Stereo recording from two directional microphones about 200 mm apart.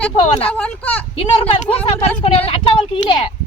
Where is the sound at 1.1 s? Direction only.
30° left (ahead or behind).